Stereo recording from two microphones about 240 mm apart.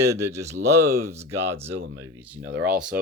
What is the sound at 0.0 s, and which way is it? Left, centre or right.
Speech, centre.